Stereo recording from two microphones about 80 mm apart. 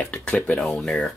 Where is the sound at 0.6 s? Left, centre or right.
Centre.